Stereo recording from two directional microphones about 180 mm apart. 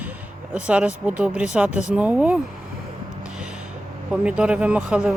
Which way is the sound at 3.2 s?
5° right (ahead or behind).